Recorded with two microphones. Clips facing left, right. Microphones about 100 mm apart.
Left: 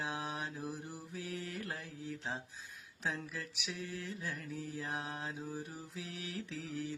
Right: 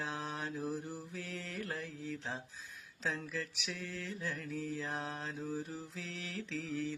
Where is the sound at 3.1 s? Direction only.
15° left (ahead or behind).